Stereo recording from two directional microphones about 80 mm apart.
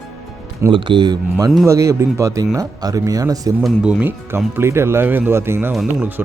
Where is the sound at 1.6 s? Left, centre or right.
Right.